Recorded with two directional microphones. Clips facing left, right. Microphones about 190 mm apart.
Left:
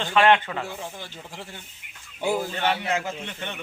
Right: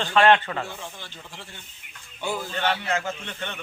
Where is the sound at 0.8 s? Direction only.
40° left (ahead or behind).